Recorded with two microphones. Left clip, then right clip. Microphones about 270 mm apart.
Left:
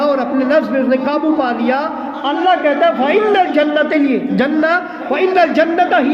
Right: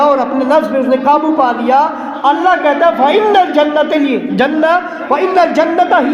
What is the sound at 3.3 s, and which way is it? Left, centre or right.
A man's voice, centre.